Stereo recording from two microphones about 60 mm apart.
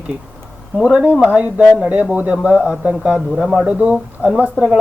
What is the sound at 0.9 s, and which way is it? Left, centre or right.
Speech, right.